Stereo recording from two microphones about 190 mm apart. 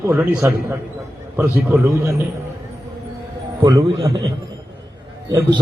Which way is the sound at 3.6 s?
20° right (ahead or behind).